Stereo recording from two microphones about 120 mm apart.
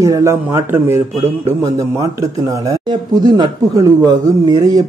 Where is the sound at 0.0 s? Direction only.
25° right (ahead or behind).